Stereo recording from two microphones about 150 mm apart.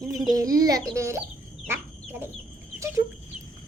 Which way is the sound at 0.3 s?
25° right (ahead or behind).